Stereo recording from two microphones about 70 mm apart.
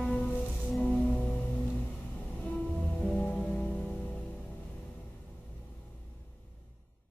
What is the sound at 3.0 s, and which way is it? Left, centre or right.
Music, centre.